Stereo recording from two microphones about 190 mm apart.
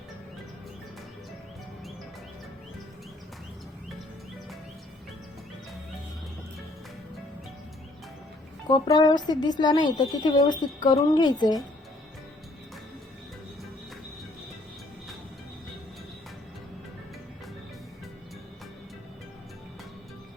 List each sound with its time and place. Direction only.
8.7 s a woman's voice: 20° left (ahead or behind)